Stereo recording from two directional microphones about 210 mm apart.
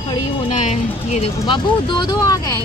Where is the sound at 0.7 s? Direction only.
30° left (ahead or behind).